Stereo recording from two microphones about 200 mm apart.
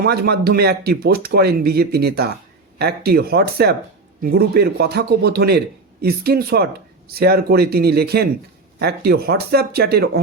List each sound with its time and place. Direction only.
0.0 s a man's voice: 50° right (ahead or behind)